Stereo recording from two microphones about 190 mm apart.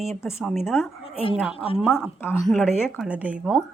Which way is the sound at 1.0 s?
30° left (ahead or behind).